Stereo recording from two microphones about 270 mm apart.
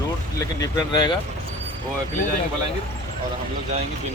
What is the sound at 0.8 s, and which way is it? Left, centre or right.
Speech, centre.